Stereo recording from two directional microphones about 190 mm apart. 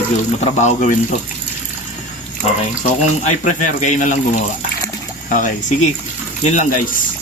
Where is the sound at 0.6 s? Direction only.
40° left (ahead or behind).